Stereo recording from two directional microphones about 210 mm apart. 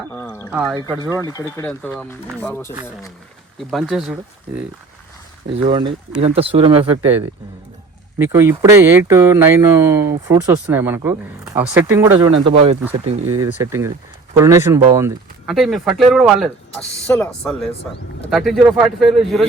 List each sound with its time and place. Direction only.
0.1 s speech: 10° left (ahead or behind)
0.5 s speech: 5° right (ahead or behind)
1.2 s speech: 15° left (ahead or behind)
1.6 s speech: 5° left (ahead or behind)
3.7 s speech: centre (ahead or behind)
5.6 s speech: 25° right (ahead or behind)
8.2 s speech: 10° right (ahead or behind)
12.3 s speech: 25° right (ahead or behind)
13.3 s speech: 15° right (ahead or behind)
15.4 s speech: centre (ahead or behind)